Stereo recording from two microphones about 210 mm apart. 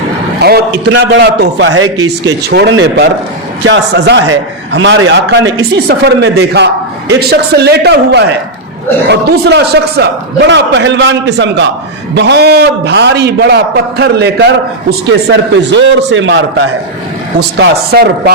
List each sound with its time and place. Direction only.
0.4 s a man's voice: 50° right (ahead or behind); by 1.9 s 70° right (ahead or behind)
2.5 s a man's voice: 50° right (ahead or behind)
2.7 s a man's voice: 65° right (ahead or behind)
17.6 s a man's voice: 50° right (ahead or behind)